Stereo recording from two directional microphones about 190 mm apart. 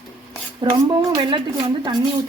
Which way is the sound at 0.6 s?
20° right (ahead or behind).